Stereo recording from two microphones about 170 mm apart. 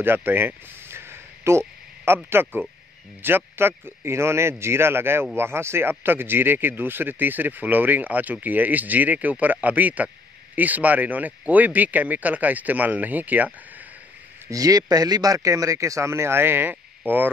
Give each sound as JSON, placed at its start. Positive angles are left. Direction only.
{"t": 0.0, "sound": "a sound", "side_deg": -10}
{"t": 2.2, "sound": "speech", "side_deg": -15}
{"t": 14.5, "sound": "speech", "side_deg": -20}